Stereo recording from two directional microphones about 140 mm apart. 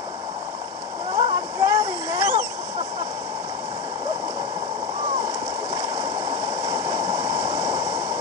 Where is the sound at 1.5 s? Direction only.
20° right (ahead or behind).